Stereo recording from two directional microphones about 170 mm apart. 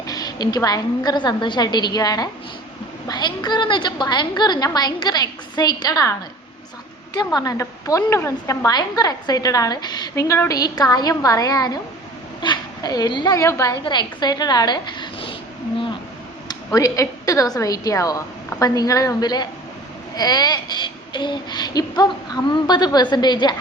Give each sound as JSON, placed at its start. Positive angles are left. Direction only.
{"t": 0.1, "sound": "a woman's voice", "side_deg": 25}
{"t": 7.3, "sound": "a woman's voice", "side_deg": 20}
{"t": 16.5, "sound": "a woman's voice", "side_deg": 20}